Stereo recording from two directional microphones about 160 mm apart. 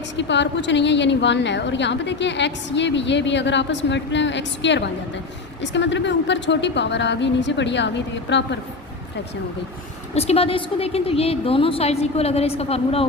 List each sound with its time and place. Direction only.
0.2 s a woman's voice: 90° left
10.2 s a woman's voice: 40° left (ahead or behind)